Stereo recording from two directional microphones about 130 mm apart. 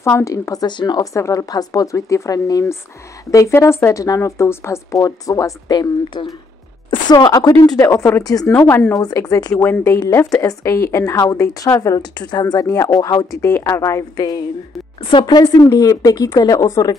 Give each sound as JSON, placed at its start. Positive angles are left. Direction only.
{"t": 0.0, "sound": "a woman's voice", "side_deg": 25}
{"t": 8.5, "sound": "a woman's voice", "side_deg": 15}